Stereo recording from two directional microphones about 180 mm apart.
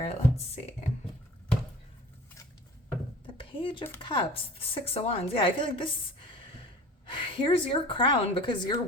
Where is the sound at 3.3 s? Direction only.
30° left (ahead or behind).